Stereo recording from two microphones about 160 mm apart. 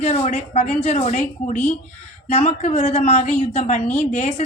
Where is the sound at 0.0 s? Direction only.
40° left (ahead or behind).